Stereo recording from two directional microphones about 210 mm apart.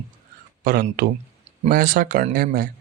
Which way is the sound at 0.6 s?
45° right (ahead or behind).